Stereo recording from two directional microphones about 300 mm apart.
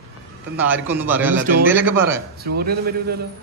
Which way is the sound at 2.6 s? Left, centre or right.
Right.